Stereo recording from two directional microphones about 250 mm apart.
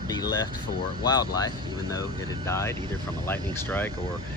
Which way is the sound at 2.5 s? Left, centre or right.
Centre.